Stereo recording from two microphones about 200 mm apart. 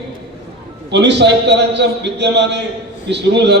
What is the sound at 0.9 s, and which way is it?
A man's voice, 60° right (ahead or behind).